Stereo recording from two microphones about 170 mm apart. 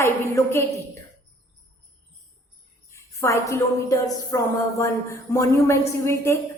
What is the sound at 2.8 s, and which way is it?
A woman's voice, 15° left (ahead or behind).